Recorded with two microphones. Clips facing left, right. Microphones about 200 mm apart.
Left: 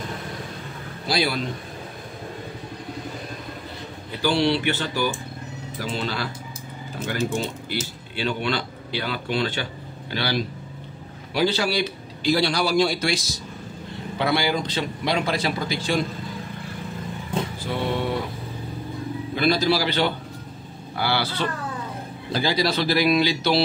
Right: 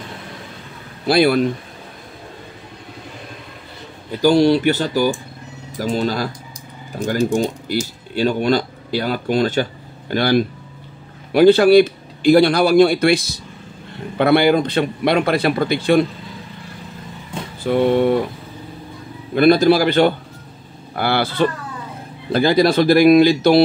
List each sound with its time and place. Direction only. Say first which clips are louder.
1.0 s a man's voice: right 10 dB; 55° right (ahead or behind)
4.2 s speech: right 8 dB; 45° right (ahead or behind)
7.0 s speech: right 8 dB; 15° right (ahead or behind)
8.1 s a man's voice: right 9 dB; 40° right (ahead or behind); by 16.1 s 60° right (ahead or behind)
17.6 s a man's voice: right 13 dB; 55° right (ahead or behind)
19.3 s speech: right 9 dB; 55° right (ahead or behind)